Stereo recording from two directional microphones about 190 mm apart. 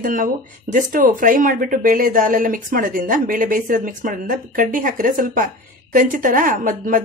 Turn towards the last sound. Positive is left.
turn(degrees=-45)  # may be behind; listen again after turning